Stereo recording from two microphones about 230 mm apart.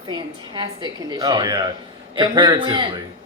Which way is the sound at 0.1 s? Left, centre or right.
Centre.